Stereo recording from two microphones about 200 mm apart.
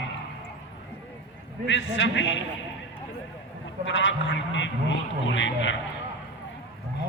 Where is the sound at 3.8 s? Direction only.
65° left (ahead or behind).